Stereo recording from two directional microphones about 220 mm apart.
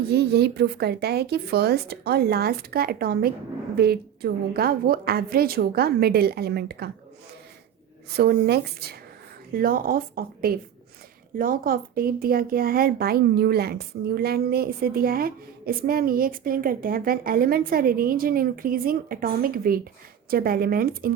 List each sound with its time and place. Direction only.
0.1 s speech: 50° right (ahead or behind)
8.1 s speech: 45° right (ahead or behind)